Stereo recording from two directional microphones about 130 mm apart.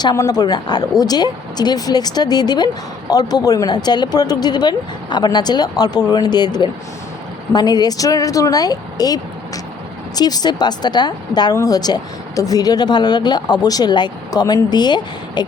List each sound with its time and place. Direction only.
0.0 s speech: 30° left (ahead or behind)